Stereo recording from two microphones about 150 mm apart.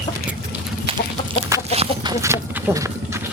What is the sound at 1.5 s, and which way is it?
Chicken, 20° right (ahead or behind).